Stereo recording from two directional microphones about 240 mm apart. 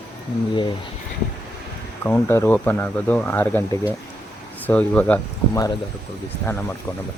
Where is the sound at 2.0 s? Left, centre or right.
Centre.